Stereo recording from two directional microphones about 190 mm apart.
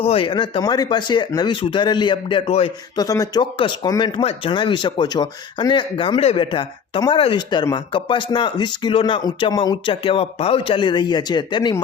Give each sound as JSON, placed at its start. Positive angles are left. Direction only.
{"t": 0.0, "sound": "speech", "side_deg": 30}